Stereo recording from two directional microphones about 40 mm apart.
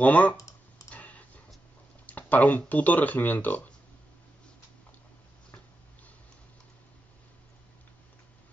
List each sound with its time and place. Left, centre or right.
0.0 s speech: left
0.8 s tick-tock: left
2.0 s speech: left